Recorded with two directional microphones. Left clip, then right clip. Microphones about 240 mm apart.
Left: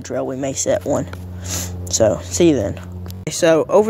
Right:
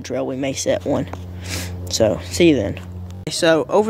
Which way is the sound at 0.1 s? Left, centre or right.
Centre.